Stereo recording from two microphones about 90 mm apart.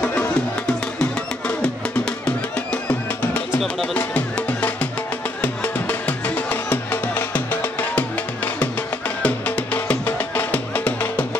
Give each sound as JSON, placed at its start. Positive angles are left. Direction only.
{"t": 0.0, "sound": "music", "side_deg": 20}
{"t": 1.6, "sound": "music", "side_deg": 10}
{"t": 9.2, "sound": "music", "side_deg": 20}